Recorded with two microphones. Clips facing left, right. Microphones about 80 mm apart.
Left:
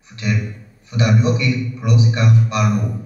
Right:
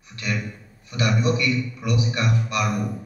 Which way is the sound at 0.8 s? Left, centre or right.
Left.